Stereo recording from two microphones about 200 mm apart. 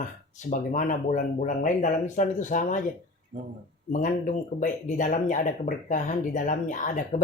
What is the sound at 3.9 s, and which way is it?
Speech, 35° left (ahead or behind).